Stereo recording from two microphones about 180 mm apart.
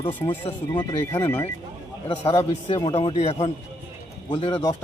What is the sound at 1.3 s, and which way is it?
Speech, 10° left (ahead or behind).